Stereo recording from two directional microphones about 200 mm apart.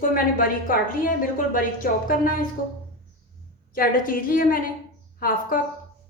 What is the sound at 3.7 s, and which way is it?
A woman's voice, 45° left (ahead or behind).